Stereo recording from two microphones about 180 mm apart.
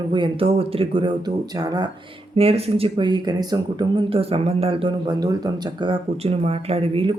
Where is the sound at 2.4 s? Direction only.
35° right (ahead or behind).